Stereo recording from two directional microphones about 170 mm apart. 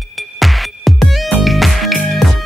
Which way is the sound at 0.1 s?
Centre (ahead or behind).